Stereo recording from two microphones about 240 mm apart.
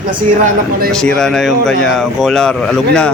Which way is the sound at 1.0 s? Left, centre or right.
Centre.